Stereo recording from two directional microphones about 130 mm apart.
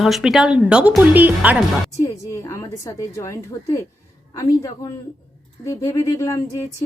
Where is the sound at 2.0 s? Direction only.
20° left (ahead or behind).